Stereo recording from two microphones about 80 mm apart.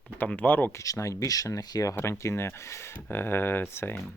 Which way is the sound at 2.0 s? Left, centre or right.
Left.